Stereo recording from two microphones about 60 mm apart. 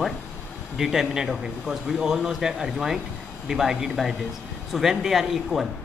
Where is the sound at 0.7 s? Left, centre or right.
Centre.